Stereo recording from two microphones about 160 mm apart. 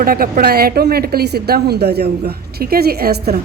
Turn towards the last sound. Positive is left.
turn(degrees=-75)  # may be behind; listen again after turning